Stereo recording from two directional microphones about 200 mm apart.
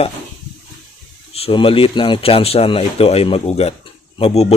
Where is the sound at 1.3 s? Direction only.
30° left (ahead or behind).